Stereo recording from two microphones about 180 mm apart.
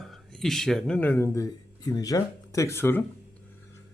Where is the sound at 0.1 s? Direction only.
Centre (ahead or behind).